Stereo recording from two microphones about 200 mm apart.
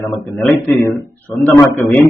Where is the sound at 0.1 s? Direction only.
Centre (ahead or behind).